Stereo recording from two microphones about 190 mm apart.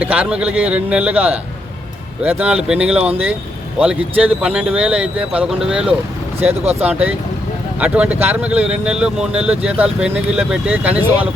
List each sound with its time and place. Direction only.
0.0 s speech: 5° right (ahead or behind)
6.4 s speech: 35° right (ahead or behind)
6.8 s speech: 10° right (ahead or behind)